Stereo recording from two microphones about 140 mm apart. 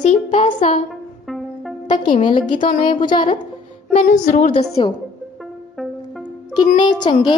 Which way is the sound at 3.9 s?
60° left (ahead or behind).